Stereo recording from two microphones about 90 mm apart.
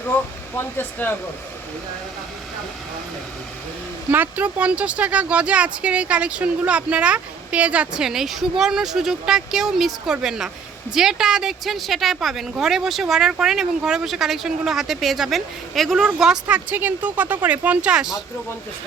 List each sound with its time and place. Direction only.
0.0 s speech: 20° left (ahead or behind)
4.1 s speech: 20° right (ahead or behind)